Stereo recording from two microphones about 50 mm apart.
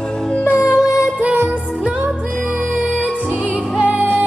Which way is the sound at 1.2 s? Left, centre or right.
Right.